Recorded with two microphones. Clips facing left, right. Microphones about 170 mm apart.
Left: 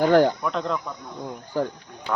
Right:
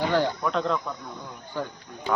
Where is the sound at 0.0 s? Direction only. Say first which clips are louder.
Left 7 dB; 50° left (ahead or behind).